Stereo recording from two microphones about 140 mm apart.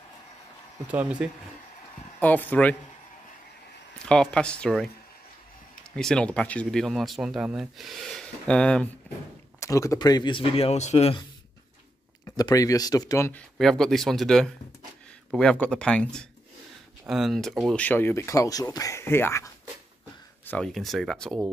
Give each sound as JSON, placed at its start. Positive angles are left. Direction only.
{"t": 0.8, "sound": "speech", "side_deg": -10}
{"t": 2.1, "sound": "speech", "side_deg": 10}
{"t": 4.0, "sound": "speech", "side_deg": 5}
{"t": 5.9, "sound": "speech", "side_deg": 5}
{"t": 9.1, "sound": "a sound", "side_deg": 10}
{"t": 9.6, "sound": "speech", "side_deg": 20}
{"t": 12.3, "sound": "speech", "side_deg": 25}
{"t": 13.3, "sound": "speech", "side_deg": 5}
{"t": 17.8, "sound": "speech", "side_deg": 15}
{"t": 20.4, "sound": "speech", "side_deg": 5}